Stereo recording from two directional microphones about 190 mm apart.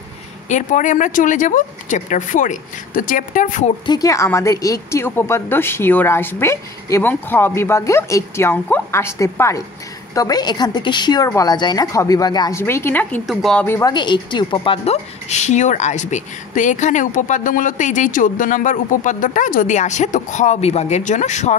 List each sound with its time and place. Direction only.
0.5 s speech: 40° left (ahead or behind)
3.8 s a woman's voice: 20° left (ahead or behind); by 21.5 s 40° left (ahead or behind)